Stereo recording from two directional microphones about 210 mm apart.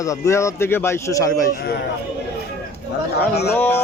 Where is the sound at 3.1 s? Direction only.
50° left (ahead or behind).